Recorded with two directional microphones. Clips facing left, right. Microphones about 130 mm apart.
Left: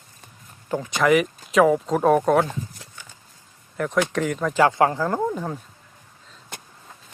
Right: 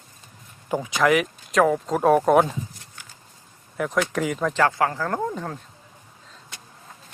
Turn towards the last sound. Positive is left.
turn(degrees=5)  # may be behind; listen again after turning